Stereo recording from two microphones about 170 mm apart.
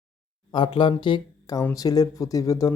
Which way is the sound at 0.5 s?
30° left (ahead or behind).